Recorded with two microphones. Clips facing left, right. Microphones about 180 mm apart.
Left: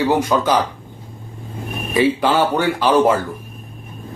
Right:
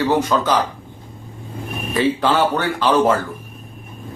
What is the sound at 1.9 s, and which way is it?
A man's voice, 10° left (ahead or behind).